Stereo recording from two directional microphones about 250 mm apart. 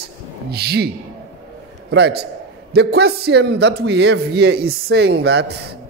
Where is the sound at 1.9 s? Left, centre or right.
Right.